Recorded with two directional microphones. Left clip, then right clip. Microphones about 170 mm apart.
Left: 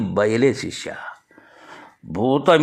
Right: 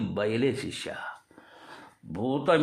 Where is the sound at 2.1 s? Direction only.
30° left (ahead or behind).